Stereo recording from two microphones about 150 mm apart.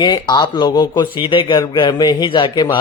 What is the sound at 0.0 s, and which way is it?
A man's voice, 25° left (ahead or behind).